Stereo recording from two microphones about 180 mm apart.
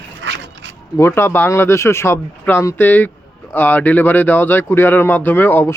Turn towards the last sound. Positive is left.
turn(degrees=10)  # may be behind; listen again after turning